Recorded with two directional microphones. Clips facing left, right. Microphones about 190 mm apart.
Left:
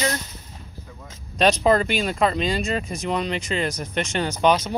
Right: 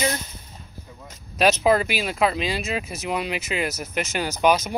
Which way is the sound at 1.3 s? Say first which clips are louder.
Left 1 dB; 5° right (ahead or behind).